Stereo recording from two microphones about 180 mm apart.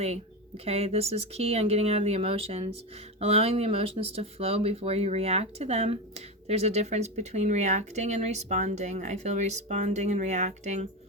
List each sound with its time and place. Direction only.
0.0 s speech: 35° right (ahead or behind)